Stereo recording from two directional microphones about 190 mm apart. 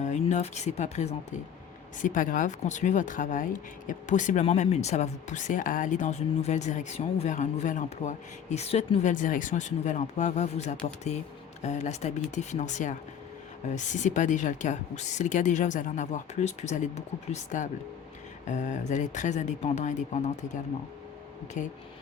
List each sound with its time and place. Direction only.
0.0 s speech: 40° left (ahead or behind)